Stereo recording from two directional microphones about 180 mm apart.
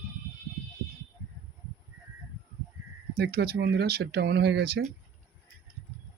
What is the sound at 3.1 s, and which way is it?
Speech, 60° right (ahead or behind).